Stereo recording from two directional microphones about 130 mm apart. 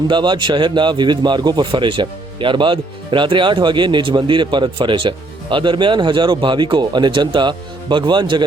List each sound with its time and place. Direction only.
0.1 s speech: 35° right (ahead or behind)